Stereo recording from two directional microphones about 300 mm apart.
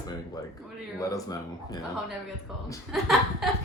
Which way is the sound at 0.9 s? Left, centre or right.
Centre.